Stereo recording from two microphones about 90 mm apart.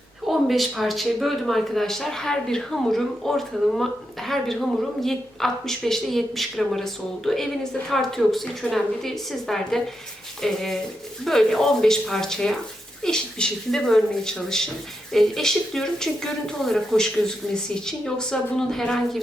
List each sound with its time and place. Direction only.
0.3 s speech: centre (ahead or behind)